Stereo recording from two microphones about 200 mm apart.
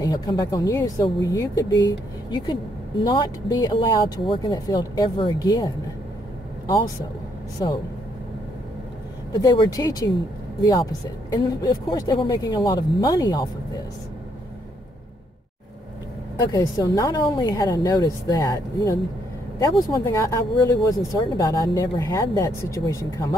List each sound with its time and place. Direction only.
0.0 s speech: 20° left (ahead or behind)
7.6 s speech: 25° left (ahead or behind)
9.3 s speech: 20° left (ahead or behind)
16.5 s speech: 20° left (ahead or behind)